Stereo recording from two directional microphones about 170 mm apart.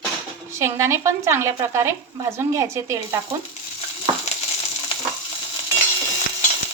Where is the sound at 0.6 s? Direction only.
15° right (ahead or behind).